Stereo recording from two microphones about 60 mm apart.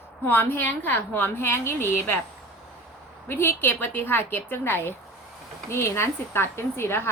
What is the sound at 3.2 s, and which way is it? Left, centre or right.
A woman's voice, left.